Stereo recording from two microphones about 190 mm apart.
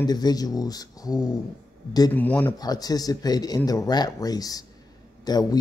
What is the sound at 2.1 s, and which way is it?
Speech, 10° left (ahead or behind).